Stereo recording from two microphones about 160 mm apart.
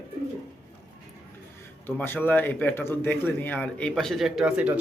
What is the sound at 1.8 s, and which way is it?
Speech, 15° left (ahead or behind).